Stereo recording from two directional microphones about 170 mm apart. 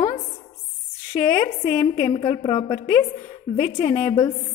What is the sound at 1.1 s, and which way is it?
A woman's voice, 25° left (ahead or behind).